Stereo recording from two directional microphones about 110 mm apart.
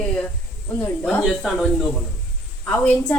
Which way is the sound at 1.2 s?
5° right (ahead or behind).